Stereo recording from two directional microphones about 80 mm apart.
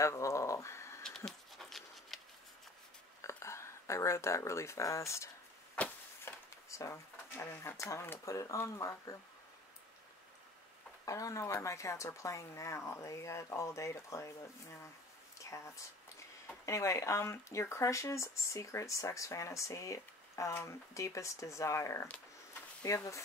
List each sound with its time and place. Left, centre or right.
0.0 s a sound: left
1.0 s dog: centre
3.2 s whispering: left
5.8 s a sound: centre
6.2 s speech: left
8.3 s speech: left
11.1 s speech: left
15.3 s a sound: left
16.6 s speech: left